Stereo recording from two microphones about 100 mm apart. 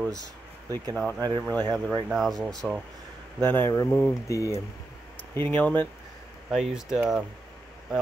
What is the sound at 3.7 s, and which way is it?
Speech, 35° left (ahead or behind).